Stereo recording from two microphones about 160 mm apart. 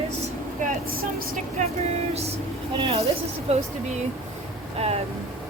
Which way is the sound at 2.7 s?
35° right (ahead or behind).